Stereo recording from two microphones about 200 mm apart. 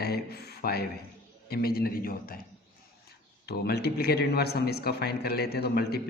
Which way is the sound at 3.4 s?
55° left (ahead or behind).